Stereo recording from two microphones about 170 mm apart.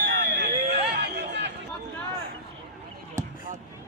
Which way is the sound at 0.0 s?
90° right.